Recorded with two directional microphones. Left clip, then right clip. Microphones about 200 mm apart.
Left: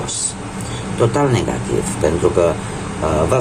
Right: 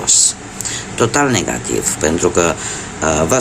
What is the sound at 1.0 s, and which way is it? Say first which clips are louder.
Speech: right 2 dB; 45° right (ahead or behind).